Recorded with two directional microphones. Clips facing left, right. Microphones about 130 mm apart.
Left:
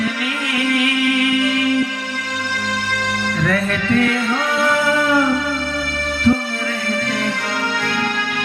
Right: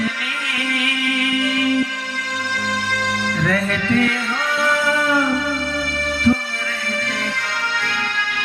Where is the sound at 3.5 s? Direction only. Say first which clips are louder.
Left 1 dB; 50° left (ahead or behind).